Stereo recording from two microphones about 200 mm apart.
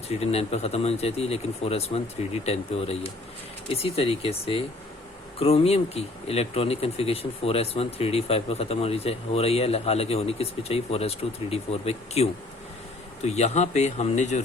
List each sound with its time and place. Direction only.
0.1 s speech: 30° left (ahead or behind)